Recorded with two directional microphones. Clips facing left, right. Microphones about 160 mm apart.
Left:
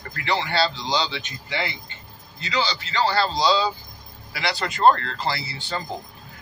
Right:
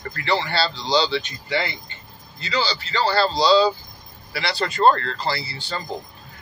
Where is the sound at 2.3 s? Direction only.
20° left (ahead or behind).